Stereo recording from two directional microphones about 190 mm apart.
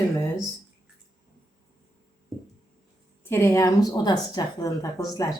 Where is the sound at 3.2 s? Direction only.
10° left (ahead or behind).